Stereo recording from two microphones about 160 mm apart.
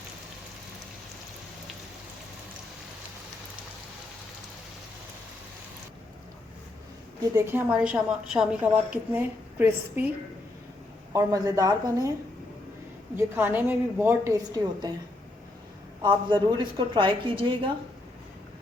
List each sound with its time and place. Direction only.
7.3 s a woman's voice: 15° right (ahead or behind)
11.1 s speech: 20° right (ahead or behind)
13.1 s a woman's voice: 15° right (ahead or behind)
16.0 s a woman's voice: 30° right (ahead or behind)